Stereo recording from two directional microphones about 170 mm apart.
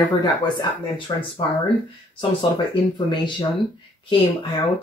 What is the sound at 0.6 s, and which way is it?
Speech, 30° left (ahead or behind).